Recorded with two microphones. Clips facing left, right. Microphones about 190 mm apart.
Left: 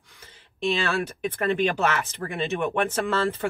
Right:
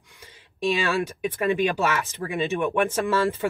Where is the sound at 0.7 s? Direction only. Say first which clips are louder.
Right 2 dB; 10° right (ahead or behind).